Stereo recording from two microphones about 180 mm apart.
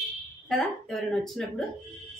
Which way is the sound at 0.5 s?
Centre (ahead or behind).